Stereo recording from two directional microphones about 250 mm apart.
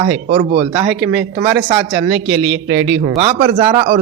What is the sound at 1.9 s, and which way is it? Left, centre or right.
Speech, right.